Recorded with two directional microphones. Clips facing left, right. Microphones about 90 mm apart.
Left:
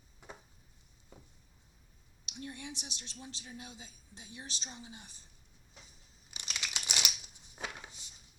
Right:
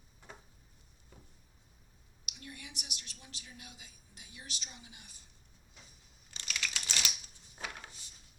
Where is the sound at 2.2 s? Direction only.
30° left (ahead or behind).